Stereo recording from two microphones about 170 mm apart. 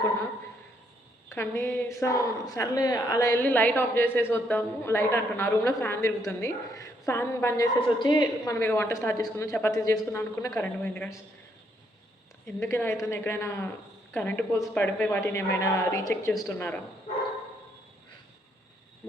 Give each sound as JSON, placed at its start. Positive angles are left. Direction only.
{"t": 1.3, "sound": "a woman's voice", "side_deg": 15}
{"t": 12.5, "sound": "a woman's voice", "side_deg": 15}